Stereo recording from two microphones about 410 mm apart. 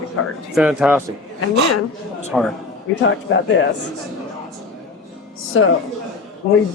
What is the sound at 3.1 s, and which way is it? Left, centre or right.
Speech, left.